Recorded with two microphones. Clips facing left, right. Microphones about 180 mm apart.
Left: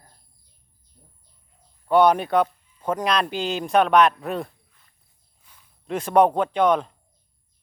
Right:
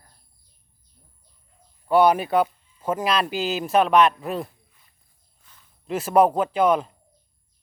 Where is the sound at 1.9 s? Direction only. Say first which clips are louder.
Even; 5° right (ahead or behind).